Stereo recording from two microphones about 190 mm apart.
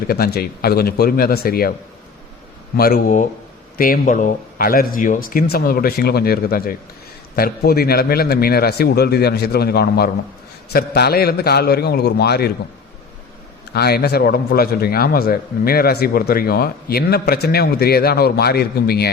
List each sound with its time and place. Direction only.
0.1 s a man's voice: 55° left (ahead or behind)
2.7 s a man's voice: 55° left (ahead or behind)
13.7 s a man's voice: 55° left (ahead or behind)